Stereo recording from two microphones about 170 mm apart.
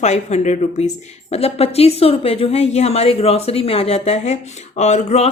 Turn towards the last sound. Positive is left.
turn(degrees=40)  # may be behind; listen again after turning